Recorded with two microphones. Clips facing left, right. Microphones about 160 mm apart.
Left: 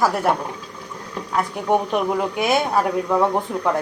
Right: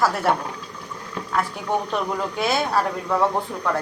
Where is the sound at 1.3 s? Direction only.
15° left (ahead or behind).